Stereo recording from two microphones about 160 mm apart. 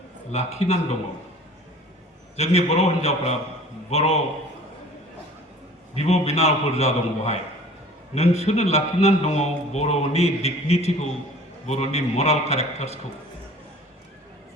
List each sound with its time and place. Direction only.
0.3 s a man's voice: 40° left (ahead or behind)
2.3 s a man's voice: 40° left (ahead or behind)
5.9 s a man's voice: 40° left (ahead or behind)